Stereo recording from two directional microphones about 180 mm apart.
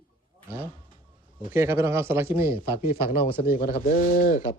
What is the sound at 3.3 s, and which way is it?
Speech, 50° left (ahead or behind).